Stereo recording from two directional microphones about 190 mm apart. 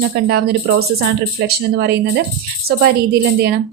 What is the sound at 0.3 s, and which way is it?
Speech, 55° right (ahead or behind).